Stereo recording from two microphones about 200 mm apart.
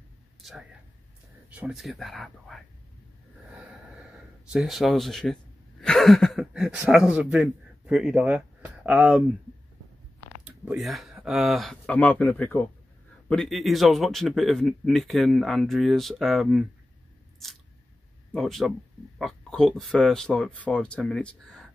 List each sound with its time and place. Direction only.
0.4 s a sound: centre (ahead or behind)
1.5 s a man's voice: 5° right (ahead or behind)
4.5 s a man's voice: centre (ahead or behind)
10.4 s a man's voice: 5° right (ahead or behind)
18.3 s a man's voice: centre (ahead or behind)